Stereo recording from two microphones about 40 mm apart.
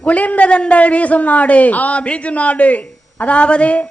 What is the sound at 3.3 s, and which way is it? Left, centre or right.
Speech, left.